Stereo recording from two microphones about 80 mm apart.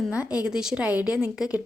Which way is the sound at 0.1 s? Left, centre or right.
Centre.